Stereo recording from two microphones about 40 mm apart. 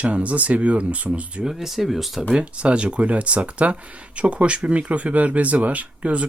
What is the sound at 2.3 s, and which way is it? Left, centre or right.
Speech, right.